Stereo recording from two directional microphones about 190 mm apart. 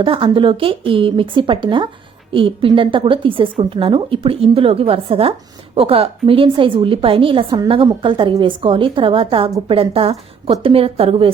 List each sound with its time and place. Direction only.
0.0 s a woman's voice: 25° right (ahead or behind)